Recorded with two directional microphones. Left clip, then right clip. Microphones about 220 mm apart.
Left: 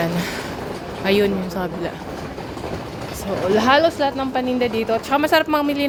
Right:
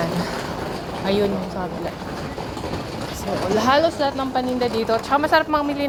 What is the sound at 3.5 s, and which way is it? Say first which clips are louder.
Speech: left 2 dB; 30° left (ahead or behind).